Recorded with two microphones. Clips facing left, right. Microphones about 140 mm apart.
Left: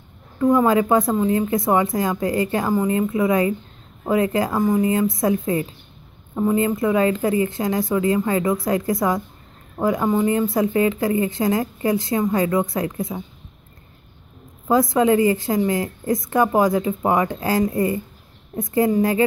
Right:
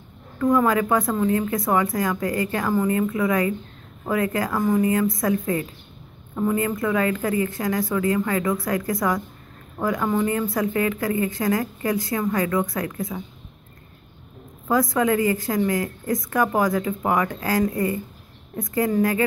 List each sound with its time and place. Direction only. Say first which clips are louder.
0.4 s speech: left 3 dB; 20° left (ahead or behind)
14.7 s speech: left 4 dB; 25° left (ahead or behind)